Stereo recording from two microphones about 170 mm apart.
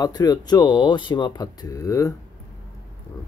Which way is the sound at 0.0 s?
25° left (ahead or behind).